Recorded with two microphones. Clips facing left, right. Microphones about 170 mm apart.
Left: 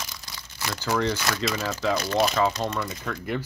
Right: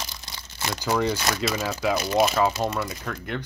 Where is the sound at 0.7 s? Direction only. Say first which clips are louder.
Right 1 dB; 15° right (ahead or behind).